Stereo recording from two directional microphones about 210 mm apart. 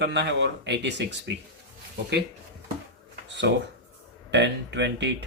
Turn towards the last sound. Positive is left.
turn(degrees=-55)  # may be behind; listen again after turning